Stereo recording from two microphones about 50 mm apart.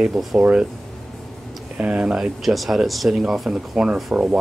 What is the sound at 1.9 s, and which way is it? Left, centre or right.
Speech, centre.